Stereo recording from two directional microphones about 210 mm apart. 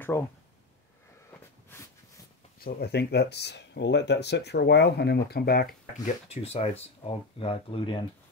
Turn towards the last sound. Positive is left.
turn(degrees=25)  # may be behind; listen again after turning